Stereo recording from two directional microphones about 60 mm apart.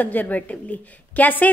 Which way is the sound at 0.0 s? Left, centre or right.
Left.